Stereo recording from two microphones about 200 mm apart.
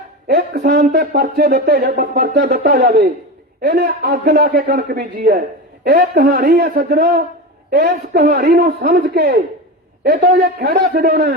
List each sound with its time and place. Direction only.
0.5 s speech: 55° right (ahead or behind)